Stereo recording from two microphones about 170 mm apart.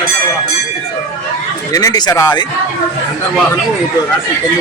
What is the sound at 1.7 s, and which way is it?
Speech, 20° left (ahead or behind).